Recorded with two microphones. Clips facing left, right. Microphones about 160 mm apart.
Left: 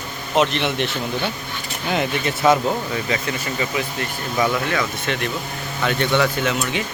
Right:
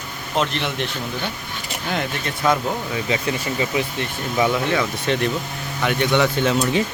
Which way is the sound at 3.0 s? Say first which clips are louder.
Right 1 dB; 20° right (ahead or behind).